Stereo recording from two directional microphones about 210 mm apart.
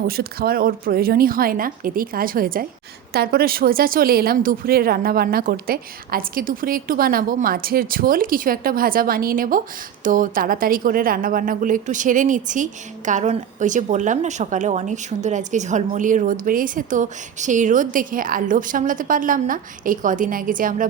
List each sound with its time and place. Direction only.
0.1 s a woman's voice: 45° right (ahead or behind)